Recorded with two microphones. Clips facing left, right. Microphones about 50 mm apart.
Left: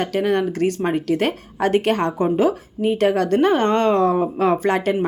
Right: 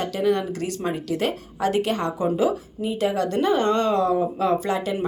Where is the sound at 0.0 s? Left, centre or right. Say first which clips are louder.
Left 3 dB; left.